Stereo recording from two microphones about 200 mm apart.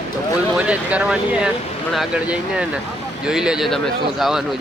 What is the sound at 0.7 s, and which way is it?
Speech, 5° right (ahead or behind).